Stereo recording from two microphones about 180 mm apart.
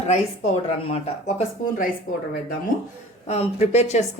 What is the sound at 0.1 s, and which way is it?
Speech, 35° left (ahead or behind).